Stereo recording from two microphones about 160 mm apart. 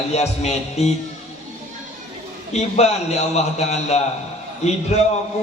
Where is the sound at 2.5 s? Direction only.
45° left (ahead or behind).